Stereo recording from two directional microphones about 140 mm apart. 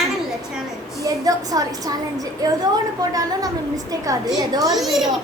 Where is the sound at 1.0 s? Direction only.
25° right (ahead or behind).